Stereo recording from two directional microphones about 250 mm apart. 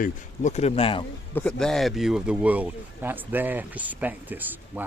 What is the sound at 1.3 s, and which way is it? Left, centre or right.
Speech, centre.